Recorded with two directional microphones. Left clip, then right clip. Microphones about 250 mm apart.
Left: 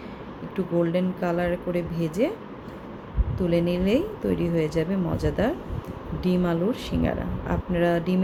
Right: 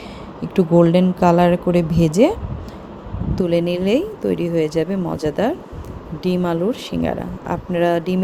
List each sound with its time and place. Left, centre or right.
0.5 s speech: right
3.3 s speech: right